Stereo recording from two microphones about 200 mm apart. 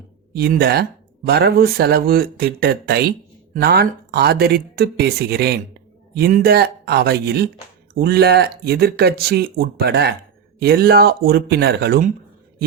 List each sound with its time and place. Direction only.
0.3 s speech: 50° right (ahead or behind)